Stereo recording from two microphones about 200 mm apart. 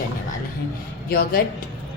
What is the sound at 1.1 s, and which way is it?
Speech, 50° left (ahead or behind).